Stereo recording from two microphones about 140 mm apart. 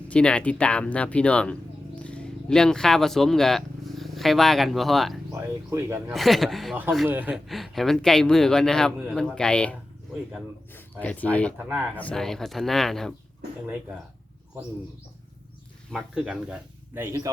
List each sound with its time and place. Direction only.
0.1 s speech: 5° left (ahead or behind)
5.3 s speech: 20° right (ahead or behind)
6.1 s speech: centre (ahead or behind)
7.1 s speech: 15° right (ahead or behind)
7.4 s speech: centre (ahead or behind)
11.0 s speech: 10° left (ahead or behind)
15.9 s speech: centre (ahead or behind)
16.9 s speech: 20° right (ahead or behind)